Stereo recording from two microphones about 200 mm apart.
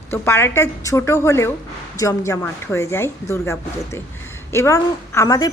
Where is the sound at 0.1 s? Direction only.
10° left (ahead or behind).